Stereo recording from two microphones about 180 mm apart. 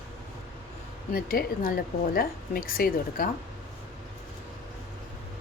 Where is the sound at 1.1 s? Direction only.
55° left (ahead or behind).